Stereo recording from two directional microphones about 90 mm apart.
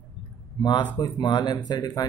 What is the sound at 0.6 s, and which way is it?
Speech, 60° left (ahead or behind).